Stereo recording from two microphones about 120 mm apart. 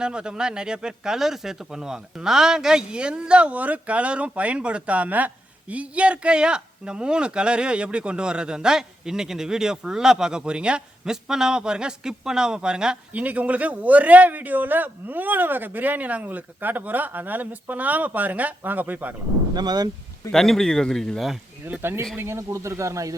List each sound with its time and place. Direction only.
0.0 s speech: 5° right (ahead or behind)
19.5 s speech: 35° right (ahead or behind)
20.3 s speech: 5° left (ahead or behind)
21.6 s speech: 20° right (ahead or behind)